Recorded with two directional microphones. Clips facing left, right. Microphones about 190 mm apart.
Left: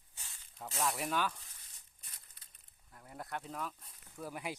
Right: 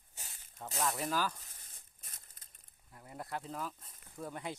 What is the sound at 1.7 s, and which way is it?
Crumpling, 45° right (ahead or behind).